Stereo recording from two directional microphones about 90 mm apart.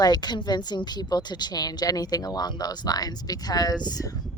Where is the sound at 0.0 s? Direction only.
50° left (ahead or behind).